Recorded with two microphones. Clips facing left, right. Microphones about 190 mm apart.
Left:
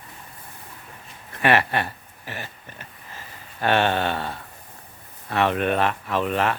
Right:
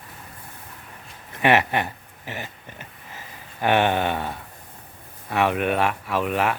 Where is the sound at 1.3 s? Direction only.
20° right (ahead or behind).